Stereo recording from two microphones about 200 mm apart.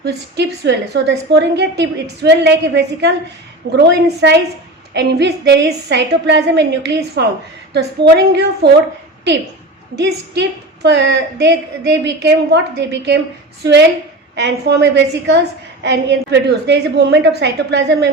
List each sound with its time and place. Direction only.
0.0 s a woman's voice: 60° right (ahead or behind)
10.0 s a woman's voice: 60° right (ahead or behind)